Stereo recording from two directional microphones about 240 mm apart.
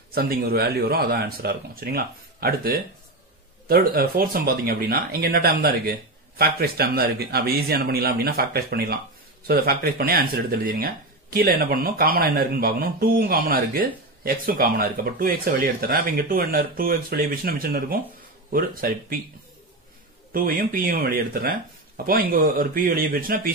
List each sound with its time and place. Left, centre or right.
0.1 s speech: right
20.3 s speech: right